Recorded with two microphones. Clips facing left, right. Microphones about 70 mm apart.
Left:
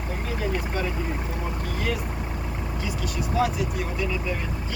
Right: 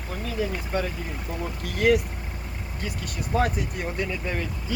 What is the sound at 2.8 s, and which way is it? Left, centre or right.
Speech, right.